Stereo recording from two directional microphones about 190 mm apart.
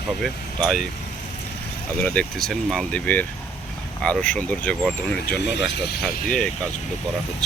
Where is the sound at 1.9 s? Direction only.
5° left (ahead or behind).